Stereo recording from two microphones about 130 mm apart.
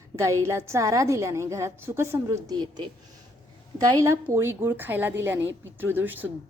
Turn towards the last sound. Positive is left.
turn(degrees=-15)  # may be behind; listen again after turning